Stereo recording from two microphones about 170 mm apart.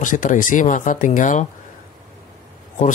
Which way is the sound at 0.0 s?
50° left (ahead or behind).